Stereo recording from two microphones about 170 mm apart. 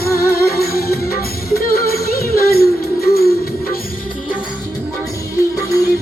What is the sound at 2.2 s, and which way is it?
Music, 65° left (ahead or behind).